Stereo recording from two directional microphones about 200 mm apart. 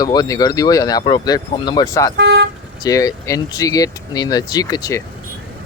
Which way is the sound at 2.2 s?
55° right (ahead or behind).